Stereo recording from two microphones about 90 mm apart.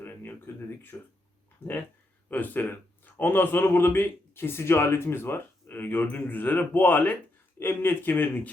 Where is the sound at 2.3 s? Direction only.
20° left (ahead or behind).